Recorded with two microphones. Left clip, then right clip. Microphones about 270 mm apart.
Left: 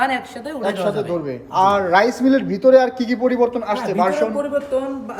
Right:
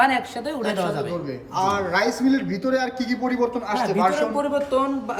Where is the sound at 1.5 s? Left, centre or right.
Centre.